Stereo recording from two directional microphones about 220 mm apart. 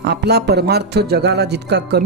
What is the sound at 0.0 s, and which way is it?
Speech, 50° right (ahead or behind).